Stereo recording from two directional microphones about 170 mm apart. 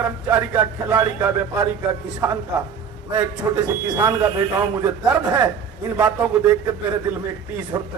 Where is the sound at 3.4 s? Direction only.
15° right (ahead or behind).